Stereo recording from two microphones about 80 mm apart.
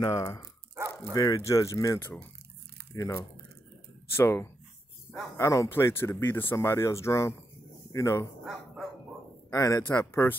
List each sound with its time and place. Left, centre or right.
0.0 s speech: left
1.1 s speech: left
1.4 s speech: left
2.0 s speech: left
2.9 s speech: left
4.2 s speech: left
9.5 s speech: left
9.9 s speech: left